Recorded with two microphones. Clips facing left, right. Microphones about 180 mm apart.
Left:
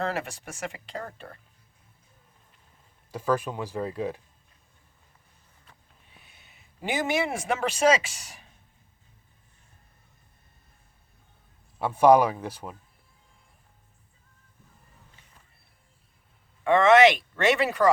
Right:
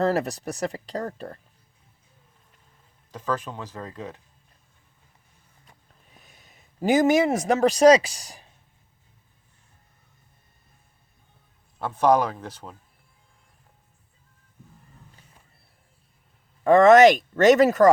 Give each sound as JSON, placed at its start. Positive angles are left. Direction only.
{"t": 0.0, "sound": "speech", "side_deg": -40}
{"t": 3.1, "sound": "speech", "side_deg": 10}
{"t": 6.1, "sound": "a man's voice", "side_deg": -40}
{"t": 11.8, "sound": "speech", "side_deg": 10}
{"t": 16.6, "sound": "speech", "side_deg": -40}